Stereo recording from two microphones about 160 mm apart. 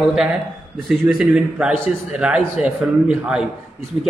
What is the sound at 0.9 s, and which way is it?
A man's voice, 5° right (ahead or behind).